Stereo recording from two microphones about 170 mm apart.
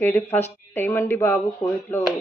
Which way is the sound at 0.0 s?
10° left (ahead or behind).